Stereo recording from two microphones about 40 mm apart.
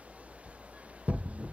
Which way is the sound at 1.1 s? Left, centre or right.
Right.